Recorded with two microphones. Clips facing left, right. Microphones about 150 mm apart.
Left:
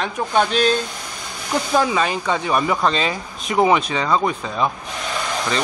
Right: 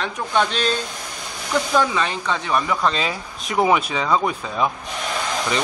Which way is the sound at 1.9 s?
10° left (ahead or behind).